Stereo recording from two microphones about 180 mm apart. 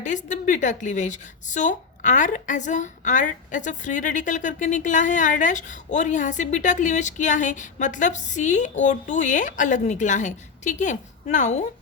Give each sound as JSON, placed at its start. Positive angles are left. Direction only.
{"t": 0.0, "sound": "a woman's voice", "side_deg": 45}